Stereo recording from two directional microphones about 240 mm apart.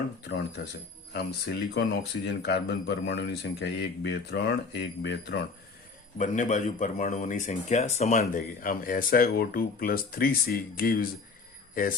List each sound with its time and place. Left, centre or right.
0.3 s speech: left
6.1 s a man's voice: left